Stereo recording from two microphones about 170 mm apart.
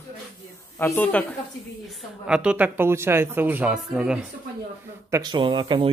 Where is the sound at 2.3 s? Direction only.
5° right (ahead or behind).